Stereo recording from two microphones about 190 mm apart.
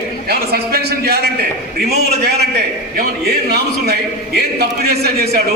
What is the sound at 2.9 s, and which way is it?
A man's voice, 55° right (ahead or behind).